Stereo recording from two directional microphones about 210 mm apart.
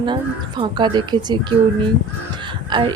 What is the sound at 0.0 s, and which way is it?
A woman's voice, 20° right (ahead or behind).